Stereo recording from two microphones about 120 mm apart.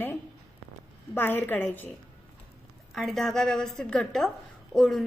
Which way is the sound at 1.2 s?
15° left (ahead or behind).